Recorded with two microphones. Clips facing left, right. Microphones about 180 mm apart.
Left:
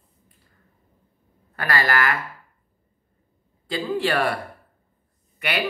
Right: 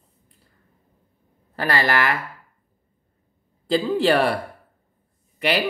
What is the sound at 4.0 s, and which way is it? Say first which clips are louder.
Speech: right 3 dB; 35° right (ahead or behind).